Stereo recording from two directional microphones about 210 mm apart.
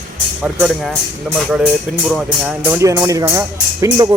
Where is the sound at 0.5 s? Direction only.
Centre (ahead or behind); by 4.0 s 15° right (ahead or behind).